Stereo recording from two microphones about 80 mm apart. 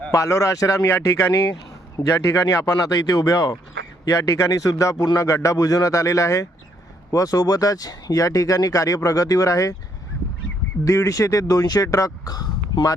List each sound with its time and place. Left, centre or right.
0.1 s a man's voice: left
10.8 s speech: left